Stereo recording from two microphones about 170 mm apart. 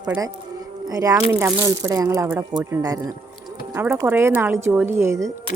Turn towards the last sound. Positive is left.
turn(degrees=-15)  # may be behind; listen again after turning